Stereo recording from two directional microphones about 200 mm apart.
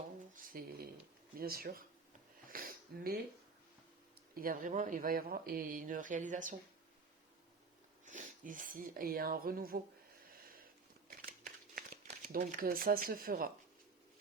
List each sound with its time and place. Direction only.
0.3 s speech: 45° right (ahead or behind)
2.5 s wheeze: 45° right (ahead or behind)
4.4 s speech: 45° right (ahead or behind)
8.0 s speech: 40° right (ahead or behind)
11.3 s a sound: 45° right (ahead or behind)